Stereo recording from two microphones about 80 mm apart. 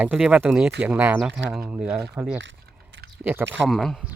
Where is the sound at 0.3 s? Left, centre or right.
Centre.